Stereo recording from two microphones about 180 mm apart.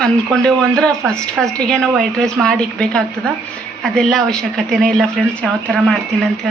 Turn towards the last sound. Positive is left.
turn(degrees=0)  # may be behind; listen again after turning